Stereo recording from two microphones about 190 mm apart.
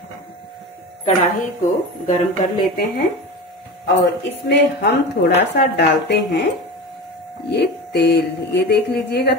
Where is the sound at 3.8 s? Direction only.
65° left (ahead or behind).